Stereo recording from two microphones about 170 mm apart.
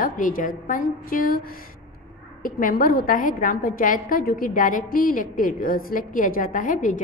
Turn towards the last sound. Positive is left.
turn(degrees=50)  # may be behind; listen again after turning